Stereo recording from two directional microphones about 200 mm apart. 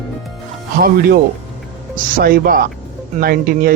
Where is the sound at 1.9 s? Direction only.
45° right (ahead or behind).